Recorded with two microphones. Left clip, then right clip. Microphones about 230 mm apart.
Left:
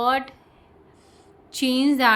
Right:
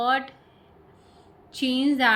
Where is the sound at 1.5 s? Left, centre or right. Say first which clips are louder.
Left 3 dB; left.